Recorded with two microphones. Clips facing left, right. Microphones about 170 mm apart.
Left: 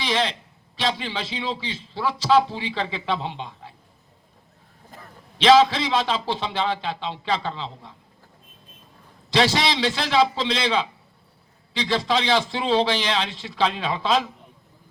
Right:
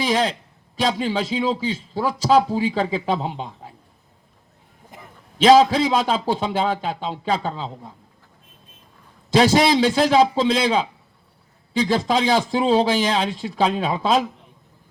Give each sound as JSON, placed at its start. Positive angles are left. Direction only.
{"t": 0.0, "sound": "a man's voice", "side_deg": -45}
{"t": 4.9, "sound": "a sound", "side_deg": -15}
{"t": 5.4, "sound": "a man's voice", "side_deg": -45}
{"t": 9.3, "sound": "a man's voice", "side_deg": -45}